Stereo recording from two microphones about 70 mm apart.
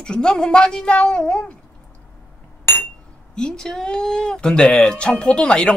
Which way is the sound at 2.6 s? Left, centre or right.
Left.